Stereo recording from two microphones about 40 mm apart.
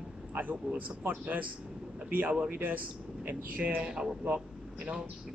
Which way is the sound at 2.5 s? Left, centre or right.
Right.